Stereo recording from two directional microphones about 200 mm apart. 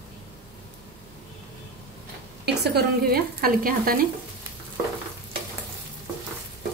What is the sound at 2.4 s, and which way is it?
Speech, 55° right (ahead or behind).